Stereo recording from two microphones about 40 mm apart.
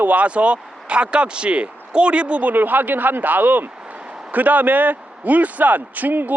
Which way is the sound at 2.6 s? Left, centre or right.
Right.